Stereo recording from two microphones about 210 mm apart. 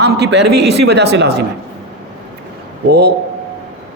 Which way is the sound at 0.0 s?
55° right (ahead or behind).